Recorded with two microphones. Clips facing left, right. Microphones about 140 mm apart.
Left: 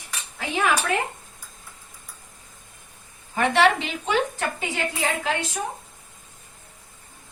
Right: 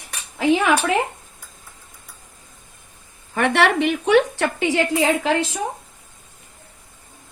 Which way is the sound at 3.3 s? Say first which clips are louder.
Right 2 dB; 65° right (ahead or behind).